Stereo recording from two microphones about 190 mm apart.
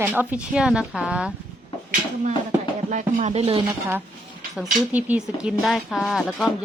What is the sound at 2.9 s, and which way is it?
Speech, 40° right (ahead or behind).